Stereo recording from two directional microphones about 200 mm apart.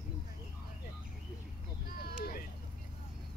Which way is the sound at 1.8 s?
50° left (ahead or behind).